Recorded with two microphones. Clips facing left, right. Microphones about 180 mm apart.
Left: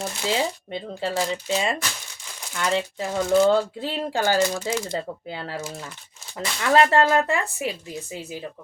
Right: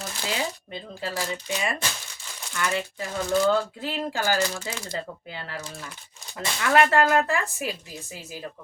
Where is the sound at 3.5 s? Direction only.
30° left (ahead or behind).